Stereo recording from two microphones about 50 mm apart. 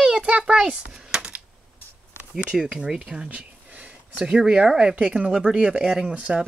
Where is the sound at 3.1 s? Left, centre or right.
Right.